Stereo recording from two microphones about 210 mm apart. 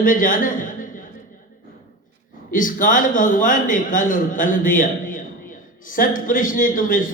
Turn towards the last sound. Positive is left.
turn(degrees=40)  # may be behind; listen again after turning